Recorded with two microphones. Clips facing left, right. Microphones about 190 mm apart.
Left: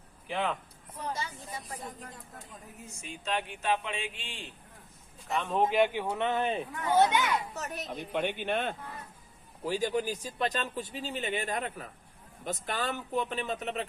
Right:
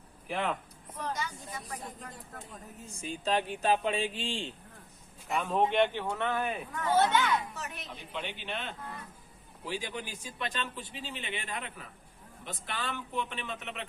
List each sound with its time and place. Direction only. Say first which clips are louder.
0.3 s speech: left 1 dB; centre (ahead or behind)
1.1 s speech: even; 30° left (ahead or behind)
2.8 s speech: right 5 dB; 35° right (ahead or behind)
5.3 s speech: even; 5° right (ahead or behind); by 7.4 s 15° left (ahead or behind)
7.5 s a man's voice: left 5 dB; 40° left (ahead or behind)